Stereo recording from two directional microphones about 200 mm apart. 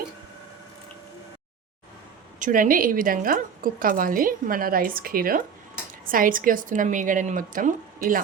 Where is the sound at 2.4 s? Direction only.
45° right (ahead or behind).